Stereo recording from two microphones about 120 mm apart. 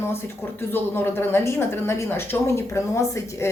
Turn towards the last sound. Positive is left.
turn(degrees=25)  # may be behind; listen again after turning